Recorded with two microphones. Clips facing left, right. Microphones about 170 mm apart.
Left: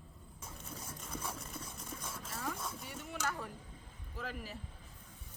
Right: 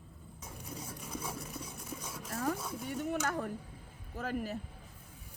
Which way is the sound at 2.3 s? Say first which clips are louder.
Right 7 dB; 45° right (ahead or behind).